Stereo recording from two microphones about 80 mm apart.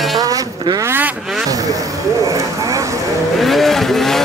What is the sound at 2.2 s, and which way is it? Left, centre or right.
Vehicle, right.